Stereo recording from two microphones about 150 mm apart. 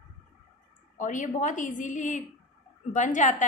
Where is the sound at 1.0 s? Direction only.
60° left (ahead or behind).